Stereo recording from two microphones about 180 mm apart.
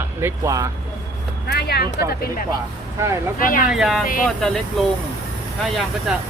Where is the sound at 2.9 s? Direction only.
15° right (ahead or behind).